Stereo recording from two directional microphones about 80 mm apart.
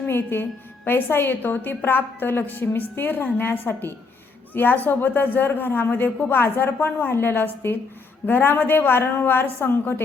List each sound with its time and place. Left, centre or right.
0.1 s speech: left